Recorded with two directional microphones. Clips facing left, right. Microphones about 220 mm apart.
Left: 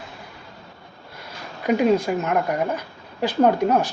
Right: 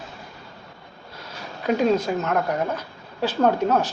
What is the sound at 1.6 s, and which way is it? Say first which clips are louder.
Speech: left 2 dB; 10° left (ahead or behind).